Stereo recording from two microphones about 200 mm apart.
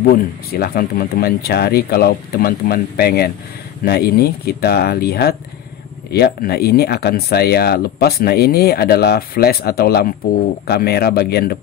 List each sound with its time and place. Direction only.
0.1 s speech: 45° left (ahead or behind)